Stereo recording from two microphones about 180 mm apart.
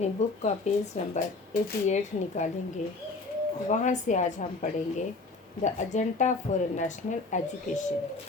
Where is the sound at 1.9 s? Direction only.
40° left (ahead or behind).